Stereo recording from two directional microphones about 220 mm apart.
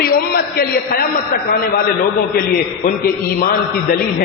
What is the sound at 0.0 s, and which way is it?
A man's voice, 45° left (ahead or behind).